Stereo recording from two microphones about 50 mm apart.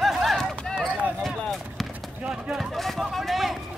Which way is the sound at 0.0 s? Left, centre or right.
Centre.